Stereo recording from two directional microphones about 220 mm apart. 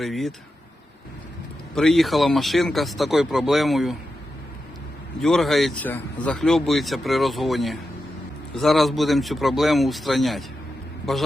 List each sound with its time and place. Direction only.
0.0 s speech: centre (ahead or behind)
1.7 s speech: centre (ahead or behind)
5.2 s speech: centre (ahead or behind)